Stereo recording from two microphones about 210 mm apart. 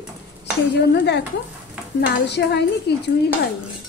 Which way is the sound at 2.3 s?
55° left (ahead or behind).